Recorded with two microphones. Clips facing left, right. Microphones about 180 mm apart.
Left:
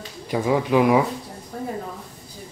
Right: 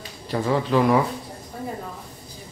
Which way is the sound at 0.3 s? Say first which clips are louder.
Left 2 dB; 10° left (ahead or behind).